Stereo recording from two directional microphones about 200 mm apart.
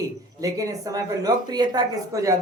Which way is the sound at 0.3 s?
15° right (ahead or behind).